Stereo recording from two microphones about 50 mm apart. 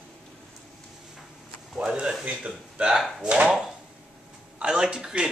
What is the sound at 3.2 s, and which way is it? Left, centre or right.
Speech, right.